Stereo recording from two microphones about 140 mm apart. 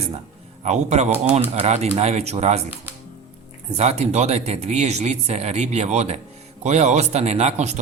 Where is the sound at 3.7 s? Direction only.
50° right (ahead or behind).